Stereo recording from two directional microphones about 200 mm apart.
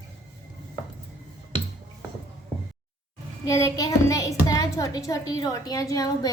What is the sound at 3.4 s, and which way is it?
A woman's voice, 15° left (ahead or behind).